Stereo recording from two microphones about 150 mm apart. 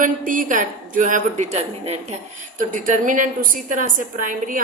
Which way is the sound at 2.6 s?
60° right (ahead or behind).